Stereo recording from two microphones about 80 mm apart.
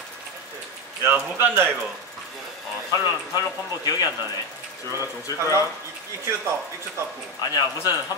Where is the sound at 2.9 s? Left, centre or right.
Left.